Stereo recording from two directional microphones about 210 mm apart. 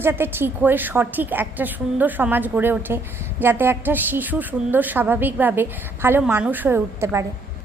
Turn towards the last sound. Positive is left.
turn(degrees=-15)  # may be behind; listen again after turning